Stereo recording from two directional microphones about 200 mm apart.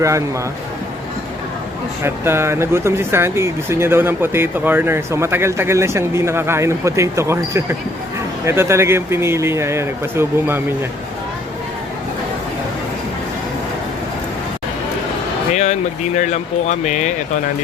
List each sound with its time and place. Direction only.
2.0 s speech: 10° right (ahead or behind)
15.5 s speech: 35° left (ahead or behind)